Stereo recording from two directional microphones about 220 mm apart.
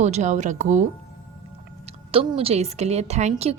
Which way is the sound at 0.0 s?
30° right (ahead or behind).